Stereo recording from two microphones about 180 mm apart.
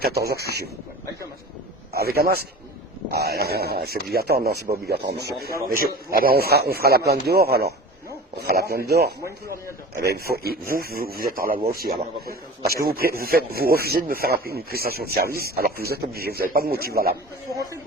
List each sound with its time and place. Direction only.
0.0 s speech: 60° right (ahead or behind)
1.9 s speech: 60° right (ahead or behind)
17.5 s speech: 15° right (ahead or behind)